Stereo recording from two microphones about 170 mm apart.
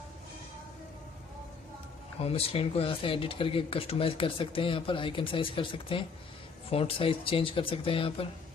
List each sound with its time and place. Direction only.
2.1 s speech: 35° left (ahead or behind)